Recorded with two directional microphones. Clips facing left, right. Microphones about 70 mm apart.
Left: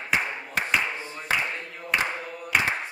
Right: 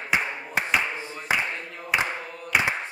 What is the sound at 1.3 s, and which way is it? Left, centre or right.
Singing, centre.